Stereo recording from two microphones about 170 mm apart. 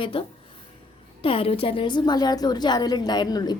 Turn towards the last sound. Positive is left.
turn(degrees=25)  # may be behind; listen again after turning